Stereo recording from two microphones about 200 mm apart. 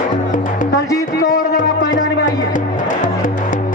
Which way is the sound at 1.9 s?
40° left (ahead or behind).